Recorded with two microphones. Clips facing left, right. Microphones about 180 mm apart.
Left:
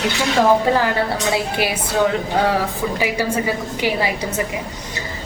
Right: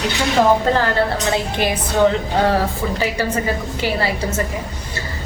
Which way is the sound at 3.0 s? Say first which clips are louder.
Even; 10° left (ahead or behind).